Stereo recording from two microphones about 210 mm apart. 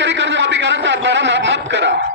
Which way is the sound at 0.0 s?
60° right (ahead or behind).